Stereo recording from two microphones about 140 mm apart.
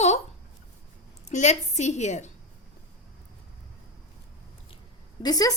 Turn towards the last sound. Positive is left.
turn(degrees=25)  # may be behind; listen again after turning